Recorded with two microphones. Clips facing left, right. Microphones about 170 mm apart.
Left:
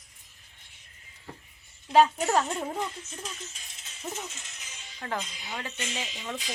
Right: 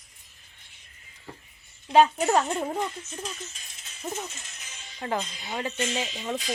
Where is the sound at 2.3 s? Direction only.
Centre (ahead or behind).